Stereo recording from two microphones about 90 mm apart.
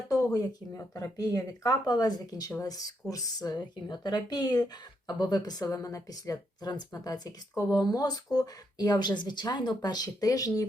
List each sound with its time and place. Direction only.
0.3 s speech: 40° left (ahead or behind)